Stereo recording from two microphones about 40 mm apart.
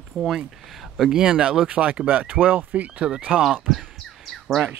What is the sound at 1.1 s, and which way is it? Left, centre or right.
Speech, centre.